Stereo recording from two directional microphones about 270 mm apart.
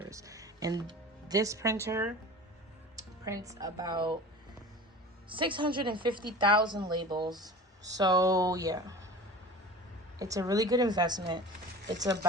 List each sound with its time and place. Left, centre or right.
0.0 s music: centre
3.2 s a woman's voice: centre
5.3 s a woman's voice: centre
10.2 s a woman's voice: centre